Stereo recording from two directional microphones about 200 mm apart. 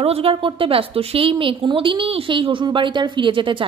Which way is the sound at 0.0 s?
30° right (ahead or behind).